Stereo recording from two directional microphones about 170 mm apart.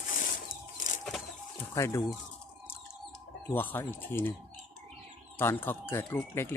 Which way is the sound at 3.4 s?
10° left (ahead or behind).